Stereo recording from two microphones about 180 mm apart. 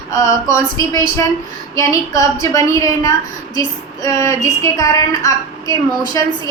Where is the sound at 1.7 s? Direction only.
20° left (ahead or behind).